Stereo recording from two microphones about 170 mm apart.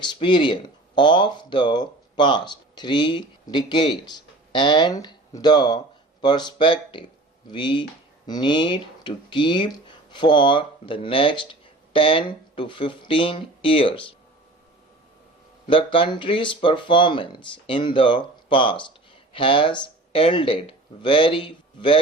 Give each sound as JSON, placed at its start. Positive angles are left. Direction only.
{"t": 0.0, "sound": "speech", "side_deg": 30}
{"t": 15.6, "sound": "speech", "side_deg": 30}